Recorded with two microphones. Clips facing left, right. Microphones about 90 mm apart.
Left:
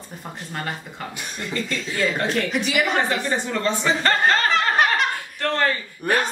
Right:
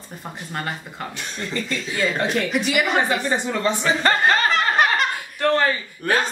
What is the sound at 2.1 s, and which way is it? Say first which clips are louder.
Speech: right 1 dB; 15° right (ahead or behind).